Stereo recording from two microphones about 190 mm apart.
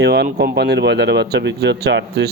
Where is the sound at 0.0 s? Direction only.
60° right (ahead or behind).